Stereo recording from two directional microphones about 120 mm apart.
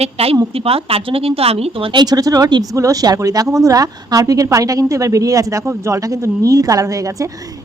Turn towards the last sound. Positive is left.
turn(degrees=-30)  # may be behind; listen again after turning